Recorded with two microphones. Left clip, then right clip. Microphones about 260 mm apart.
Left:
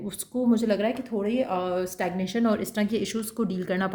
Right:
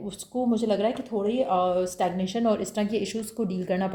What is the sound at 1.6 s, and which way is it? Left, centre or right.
Speech, left.